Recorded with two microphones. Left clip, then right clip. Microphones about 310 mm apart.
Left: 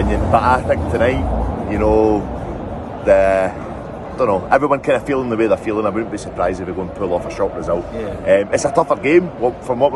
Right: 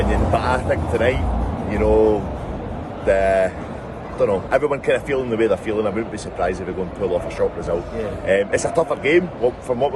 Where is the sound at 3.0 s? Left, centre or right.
Centre.